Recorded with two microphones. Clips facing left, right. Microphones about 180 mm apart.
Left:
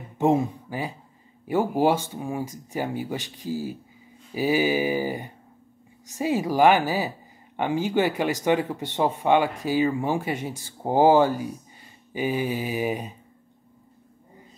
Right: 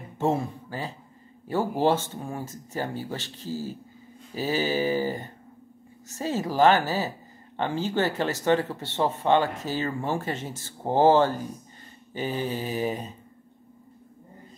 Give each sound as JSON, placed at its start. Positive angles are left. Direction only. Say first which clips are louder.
{"t": 0.2, "sound": "a woman's voice", "louder": "left 4 dB", "side_deg": 15}